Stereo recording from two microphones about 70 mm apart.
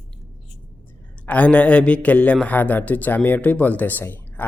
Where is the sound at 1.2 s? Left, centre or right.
Left.